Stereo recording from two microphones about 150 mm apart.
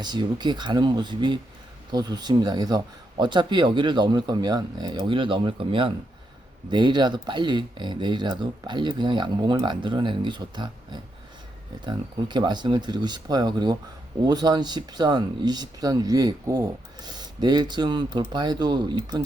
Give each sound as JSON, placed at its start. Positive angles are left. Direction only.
{"t": 0.0, "sound": "speech", "side_deg": -30}